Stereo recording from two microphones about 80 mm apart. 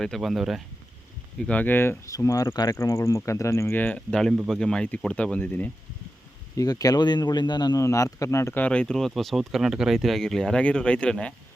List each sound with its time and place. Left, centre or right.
0.0 s speech: centre
1.4 s speech: centre
2.0 s speech: left
2.5 s speech: left
2.7 s speech: left
3.8 s speech: centre
4.1 s speech: centre
6.6 s speech: left
7.8 s speech: left
8.5 s speech: centre
9.0 s speech: centre